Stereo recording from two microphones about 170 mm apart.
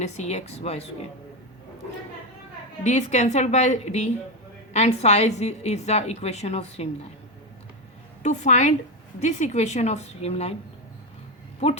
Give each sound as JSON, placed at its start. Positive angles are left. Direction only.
{"t": 0.0, "sound": "a woman's voice", "side_deg": 40}
{"t": 2.8, "sound": "a woman's voice", "side_deg": 45}
{"t": 8.2, "sound": "a woman's voice", "side_deg": 45}
{"t": 11.6, "sound": "a woman's voice", "side_deg": 35}